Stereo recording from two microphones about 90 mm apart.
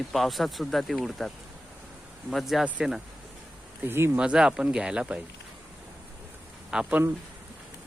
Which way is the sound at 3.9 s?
25° right (ahead or behind).